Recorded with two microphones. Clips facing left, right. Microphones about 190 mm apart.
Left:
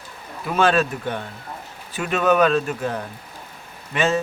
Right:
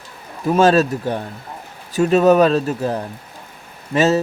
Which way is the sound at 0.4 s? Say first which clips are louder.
Right 5 dB; 40° right (ahead or behind).